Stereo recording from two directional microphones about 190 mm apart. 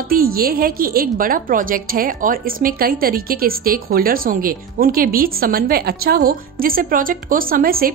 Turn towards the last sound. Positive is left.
turn(degrees=-50)  # may be behind; listen again after turning